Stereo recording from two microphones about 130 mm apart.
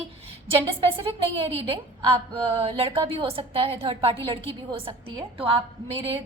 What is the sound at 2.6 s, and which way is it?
A woman's voice, 45° right (ahead or behind).